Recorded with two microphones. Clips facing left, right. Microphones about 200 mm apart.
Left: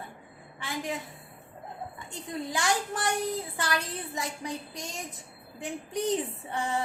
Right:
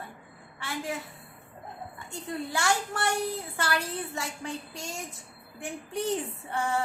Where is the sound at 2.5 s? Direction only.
15° left (ahead or behind).